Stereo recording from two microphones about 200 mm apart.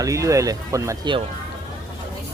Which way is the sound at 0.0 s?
15° right (ahead or behind).